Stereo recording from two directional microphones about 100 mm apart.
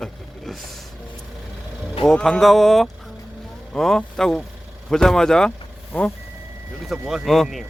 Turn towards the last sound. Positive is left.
turn(degrees=0)  # may be behind; listen again after turning